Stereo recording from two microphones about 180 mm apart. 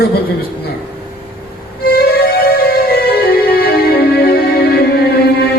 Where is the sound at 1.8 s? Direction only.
60° left (ahead or behind).